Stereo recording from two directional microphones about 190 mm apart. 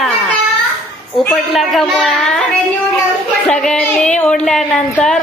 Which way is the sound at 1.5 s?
Centre (ahead or behind).